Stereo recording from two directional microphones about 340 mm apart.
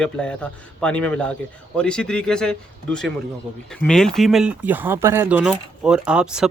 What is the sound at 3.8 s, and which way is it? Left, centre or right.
Speech, centre.